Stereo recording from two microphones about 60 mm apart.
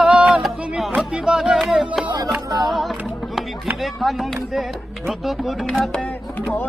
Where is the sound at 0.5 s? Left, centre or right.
Centre.